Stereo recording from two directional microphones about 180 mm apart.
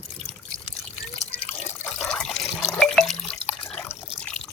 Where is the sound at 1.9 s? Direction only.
5° left (ahead or behind).